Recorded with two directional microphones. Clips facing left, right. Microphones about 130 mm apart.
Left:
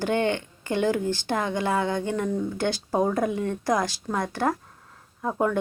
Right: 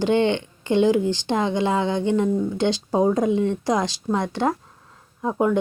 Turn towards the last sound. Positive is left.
turn(degrees=-15)  # may be behind; listen again after turning